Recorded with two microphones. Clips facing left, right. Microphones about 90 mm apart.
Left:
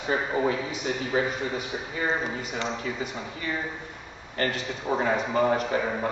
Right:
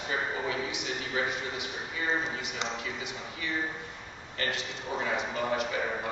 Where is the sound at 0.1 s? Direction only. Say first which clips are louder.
Left 7 dB; 40° left (ahead or behind).